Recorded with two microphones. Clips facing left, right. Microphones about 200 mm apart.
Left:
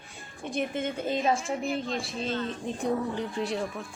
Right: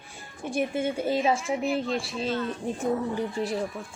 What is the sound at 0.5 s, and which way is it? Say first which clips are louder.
A woman's voice: right 3 dB; 10° right (ahead or behind).